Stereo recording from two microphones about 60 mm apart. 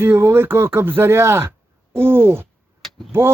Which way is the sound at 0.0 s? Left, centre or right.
Right.